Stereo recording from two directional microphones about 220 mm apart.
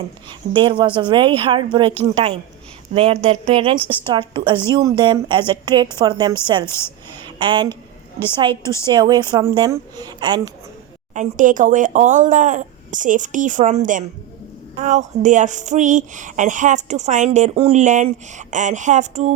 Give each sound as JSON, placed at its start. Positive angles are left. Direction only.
{"t": 0.3, "sound": "a woman's voice", "side_deg": -20}
{"t": 8.6, "sound": "a woman's voice", "side_deg": 15}
{"t": 8.9, "sound": "a woman's voice", "side_deg": -20}
{"t": 11.1, "sound": "speech", "side_deg": -35}